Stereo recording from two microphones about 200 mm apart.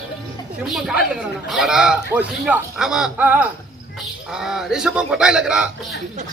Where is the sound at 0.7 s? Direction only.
Centre (ahead or behind).